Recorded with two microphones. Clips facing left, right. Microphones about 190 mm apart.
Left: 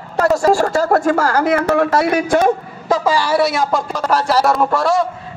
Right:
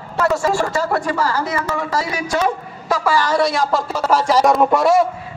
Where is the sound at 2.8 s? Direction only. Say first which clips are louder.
Left 2 dB; 20° left (ahead or behind); by 3.8 s 5° left (ahead or behind).